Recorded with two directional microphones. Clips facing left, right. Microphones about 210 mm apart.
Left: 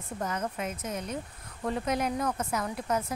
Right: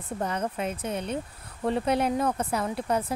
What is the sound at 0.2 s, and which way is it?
Speech, 30° right (ahead or behind).